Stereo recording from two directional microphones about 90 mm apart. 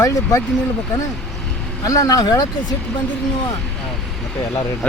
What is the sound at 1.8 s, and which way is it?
Speech, 40° left (ahead or behind).